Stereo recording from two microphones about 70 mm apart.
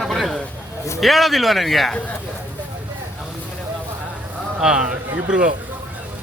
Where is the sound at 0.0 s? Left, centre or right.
Centre.